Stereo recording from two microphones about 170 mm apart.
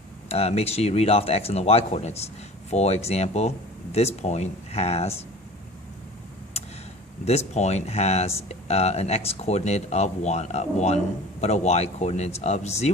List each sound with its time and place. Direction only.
0.3 s speech: 40° left (ahead or behind)
6.5 s tick-tock: 35° left (ahead or behind)
7.3 s speech: 40° left (ahead or behind)